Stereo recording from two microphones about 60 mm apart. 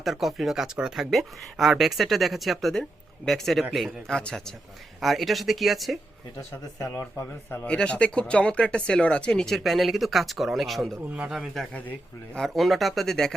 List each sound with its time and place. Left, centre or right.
0.0 s speech: centre
4.1 s speech: centre
4.9 s speech: centre
6.3 s speech: left
7.0 s speech: left
7.6 s speech: left
9.6 s speech: centre
11.7 s speech: left
12.4 s speech: centre